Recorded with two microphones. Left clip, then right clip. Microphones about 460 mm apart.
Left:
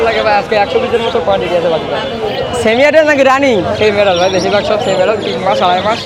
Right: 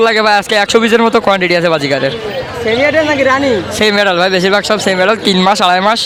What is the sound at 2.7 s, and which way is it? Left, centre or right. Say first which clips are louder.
Speech: left 3 dB; centre.